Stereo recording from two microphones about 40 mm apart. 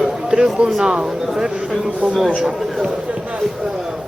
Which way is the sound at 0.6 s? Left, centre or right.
Centre.